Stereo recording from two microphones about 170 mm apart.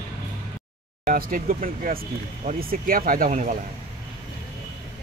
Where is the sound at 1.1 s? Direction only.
55° right (ahead or behind).